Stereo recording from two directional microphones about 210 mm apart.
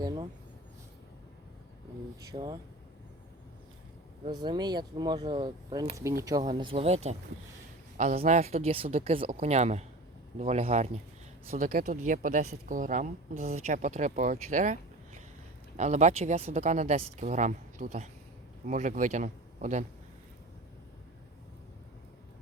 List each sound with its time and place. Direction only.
0.0 s speech: 20° right (ahead or behind)
2.3 s speech: 20° right (ahead or behind)
4.4 s speech: 20° right (ahead or behind)
11.5 s speech: 40° right (ahead or behind)